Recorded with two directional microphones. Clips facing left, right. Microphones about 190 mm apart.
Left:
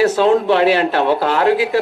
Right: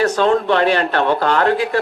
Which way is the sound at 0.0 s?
5° left (ahead or behind).